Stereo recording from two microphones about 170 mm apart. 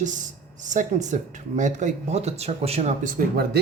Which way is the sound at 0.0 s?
45° right (ahead or behind).